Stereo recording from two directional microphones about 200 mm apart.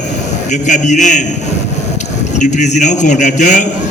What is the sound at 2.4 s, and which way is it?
A man's voice, 35° left (ahead or behind).